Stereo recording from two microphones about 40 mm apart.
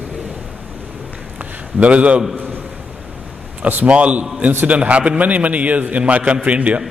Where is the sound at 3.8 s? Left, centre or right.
Right.